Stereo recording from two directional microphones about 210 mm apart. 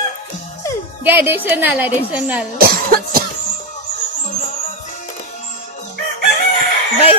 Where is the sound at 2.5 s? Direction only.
45° right (ahead or behind).